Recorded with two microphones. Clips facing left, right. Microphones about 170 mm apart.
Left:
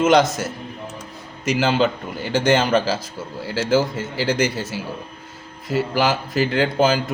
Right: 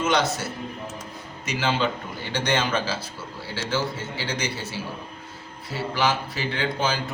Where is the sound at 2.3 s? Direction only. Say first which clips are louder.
Left 7 dB; 40° left (ahead or behind).